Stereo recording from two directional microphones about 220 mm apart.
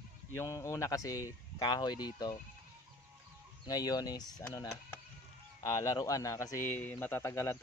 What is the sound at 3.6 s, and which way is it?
A man's voice, 15° left (ahead or behind).